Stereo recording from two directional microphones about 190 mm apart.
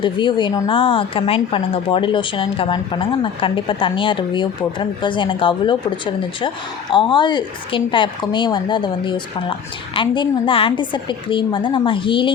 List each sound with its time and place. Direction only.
0.0 s a woman's voice: 25° left (ahead or behind)